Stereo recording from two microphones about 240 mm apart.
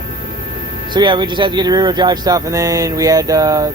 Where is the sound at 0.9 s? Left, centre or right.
Centre.